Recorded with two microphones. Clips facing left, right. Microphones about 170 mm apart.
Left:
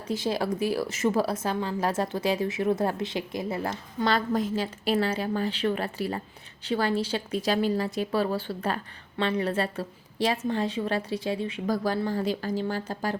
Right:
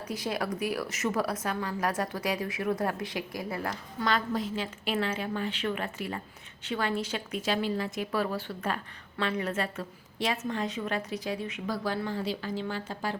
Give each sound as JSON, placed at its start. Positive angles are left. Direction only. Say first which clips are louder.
{"t": 0.1, "sound": "speech", "louder": "left 5 dB", "side_deg": 25}
{"t": 4.3, "sound": "speech", "louder": "left 5 dB", "side_deg": 45}
{"t": 11.7, "sound": "speech", "louder": "left 5 dB", "side_deg": 40}